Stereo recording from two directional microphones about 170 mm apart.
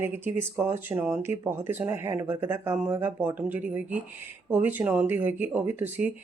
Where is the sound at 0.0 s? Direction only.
15° right (ahead or behind).